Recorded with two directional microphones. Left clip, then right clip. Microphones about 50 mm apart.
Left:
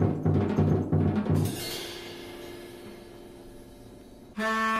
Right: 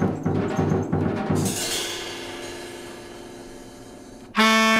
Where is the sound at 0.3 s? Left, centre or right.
Left.